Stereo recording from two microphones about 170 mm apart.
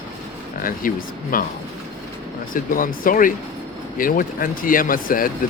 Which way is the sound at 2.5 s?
55° left (ahead or behind).